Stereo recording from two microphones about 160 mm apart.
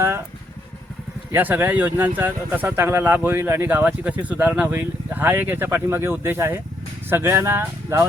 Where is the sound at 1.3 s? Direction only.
10° right (ahead or behind).